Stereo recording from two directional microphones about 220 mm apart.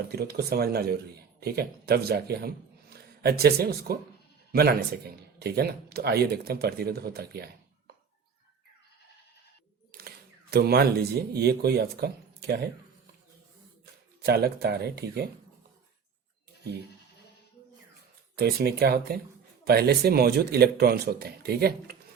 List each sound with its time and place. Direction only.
0.1 s speech: 45° right (ahead or behind)
10.5 s speech: 45° right (ahead or behind)
14.3 s speech: 45° right (ahead or behind)
18.3 s speech: 45° right (ahead or behind)